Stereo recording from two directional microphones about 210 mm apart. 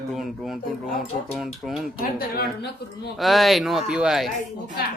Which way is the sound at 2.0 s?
45° left (ahead or behind).